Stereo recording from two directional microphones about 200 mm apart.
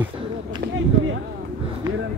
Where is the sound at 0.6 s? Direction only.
55° right (ahead or behind).